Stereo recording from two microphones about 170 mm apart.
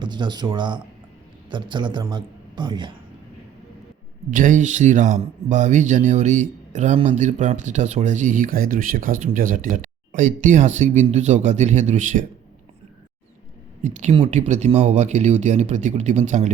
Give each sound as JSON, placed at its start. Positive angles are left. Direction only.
{"t": 0.0, "sound": "a man's voice", "side_deg": -25}
{"t": 4.3, "sound": "speech", "side_deg": -50}
{"t": 13.8, "sound": "speech", "side_deg": -45}